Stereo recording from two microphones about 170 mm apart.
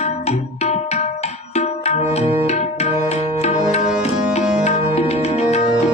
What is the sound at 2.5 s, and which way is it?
Music, 40° left (ahead or behind).